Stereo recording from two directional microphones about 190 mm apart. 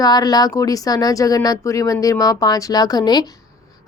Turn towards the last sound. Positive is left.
turn(degrees=20)  # may be behind; listen again after turning